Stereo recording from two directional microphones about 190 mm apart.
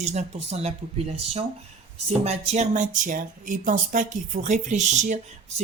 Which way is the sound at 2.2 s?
35° right (ahead or behind).